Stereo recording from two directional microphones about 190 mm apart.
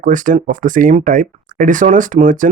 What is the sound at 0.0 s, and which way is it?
Speech, 45° right (ahead or behind).